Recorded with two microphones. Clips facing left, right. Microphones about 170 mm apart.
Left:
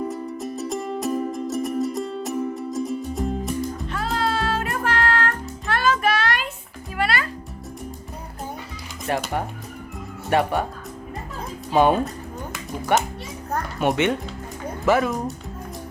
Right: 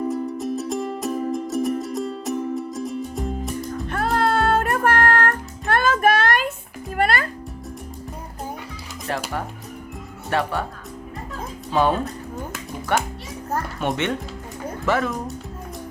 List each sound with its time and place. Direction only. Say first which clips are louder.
0.1 s music: right 4 dB; centre (ahead or behind)
3.8 s music: right 7 dB; 55° right (ahead or behind)
10.2 s speech: left 3 dB; 15° left (ahead or behind)
11.7 s a child's voice: left 2 dB; 15° left (ahead or behind)